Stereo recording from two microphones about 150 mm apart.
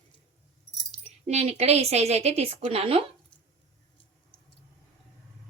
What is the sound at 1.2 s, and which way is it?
A woman's voice, 45° right (ahead or behind).